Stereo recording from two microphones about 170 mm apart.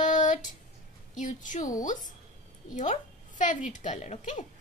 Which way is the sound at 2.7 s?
45° left (ahead or behind).